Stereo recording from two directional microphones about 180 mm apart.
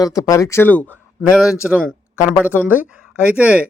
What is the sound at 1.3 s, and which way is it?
Speech, 5° right (ahead or behind).